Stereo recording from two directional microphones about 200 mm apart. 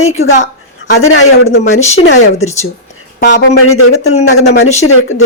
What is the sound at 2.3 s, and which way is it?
Speech, 35° left (ahead or behind).